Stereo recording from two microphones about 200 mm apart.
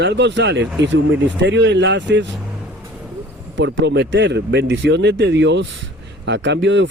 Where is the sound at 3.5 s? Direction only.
65° right (ahead or behind).